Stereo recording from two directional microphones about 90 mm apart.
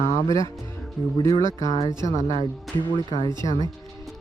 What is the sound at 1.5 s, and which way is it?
Speech, 60° right (ahead or behind).